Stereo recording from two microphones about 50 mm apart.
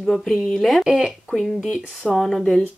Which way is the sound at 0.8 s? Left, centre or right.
Centre.